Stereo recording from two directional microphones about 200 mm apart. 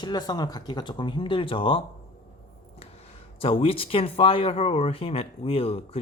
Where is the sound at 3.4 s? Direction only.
30° left (ahead or behind).